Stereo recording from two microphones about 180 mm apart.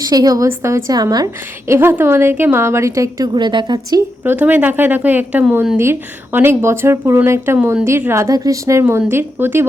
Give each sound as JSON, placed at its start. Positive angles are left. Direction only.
{"t": 0.1, "sound": "a woman's voice", "side_deg": -20}
{"t": 4.2, "sound": "speech", "side_deg": -10}